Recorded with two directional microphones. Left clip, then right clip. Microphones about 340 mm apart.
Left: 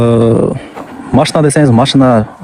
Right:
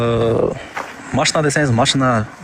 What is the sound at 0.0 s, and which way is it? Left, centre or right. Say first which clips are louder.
Speech: left 6 dB; centre.